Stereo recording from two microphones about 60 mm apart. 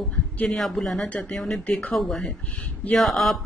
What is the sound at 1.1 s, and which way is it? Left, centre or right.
Speech, left.